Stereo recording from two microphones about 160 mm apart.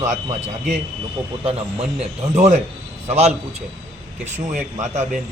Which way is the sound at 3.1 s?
45° right (ahead or behind).